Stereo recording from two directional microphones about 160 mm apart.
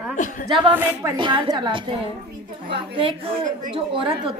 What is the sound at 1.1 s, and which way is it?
A woman's voice, 30° right (ahead or behind).